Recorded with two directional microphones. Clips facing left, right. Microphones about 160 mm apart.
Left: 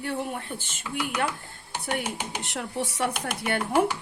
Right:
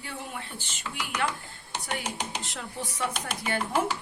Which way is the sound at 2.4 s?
65° left (ahead or behind).